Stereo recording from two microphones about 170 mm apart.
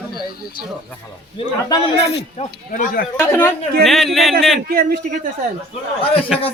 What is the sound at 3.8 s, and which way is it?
Speech, centre (ahead or behind).